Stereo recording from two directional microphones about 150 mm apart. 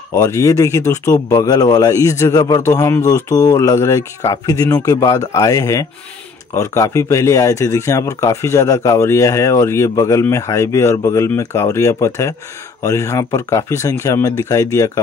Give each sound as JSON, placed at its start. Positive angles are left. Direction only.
{"t": 0.1, "sound": "speech", "side_deg": 20}